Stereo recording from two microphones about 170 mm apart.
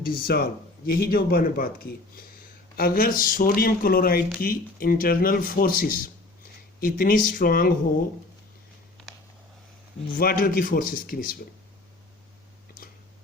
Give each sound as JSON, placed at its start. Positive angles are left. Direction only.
{"t": 0.3, "sound": "speech", "side_deg": 70}
{"t": 10.2, "sound": "speech", "side_deg": 55}